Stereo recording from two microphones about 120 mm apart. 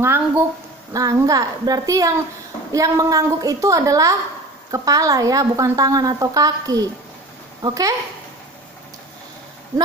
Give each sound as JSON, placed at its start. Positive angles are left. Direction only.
{"t": 0.0, "sound": "a woman's voice", "side_deg": -20}